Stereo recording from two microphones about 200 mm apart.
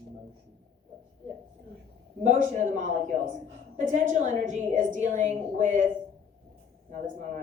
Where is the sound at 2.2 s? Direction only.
35° right (ahead or behind).